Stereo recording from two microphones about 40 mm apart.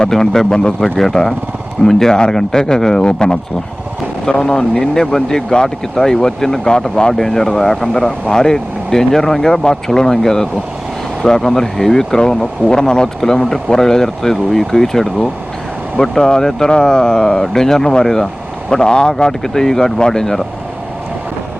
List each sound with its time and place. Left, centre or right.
0.0 s speech: centre
8.3 s speech: centre